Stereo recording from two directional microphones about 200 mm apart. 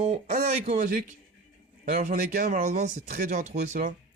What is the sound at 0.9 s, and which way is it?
Speech, 40° right (ahead or behind).